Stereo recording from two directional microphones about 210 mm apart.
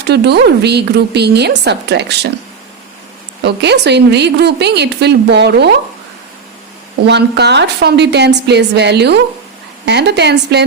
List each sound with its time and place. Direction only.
0.1 s a woman's voice: 55° right (ahead or behind)
3.4 s a woman's voice: 55° right (ahead or behind)
7.0 s a woman's voice: 55° right (ahead or behind)